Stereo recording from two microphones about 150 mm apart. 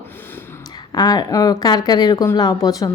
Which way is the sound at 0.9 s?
25° left (ahead or behind).